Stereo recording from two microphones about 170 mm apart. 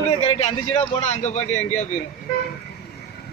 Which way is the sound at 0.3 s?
35° left (ahead or behind).